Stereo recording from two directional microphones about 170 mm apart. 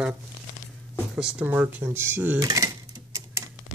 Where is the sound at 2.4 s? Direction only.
20° right (ahead or behind).